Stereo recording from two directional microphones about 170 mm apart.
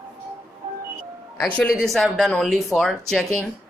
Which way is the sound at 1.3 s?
10° left (ahead or behind).